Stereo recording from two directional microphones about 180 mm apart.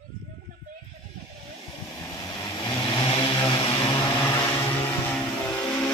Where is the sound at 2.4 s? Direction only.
25° left (ahead or behind).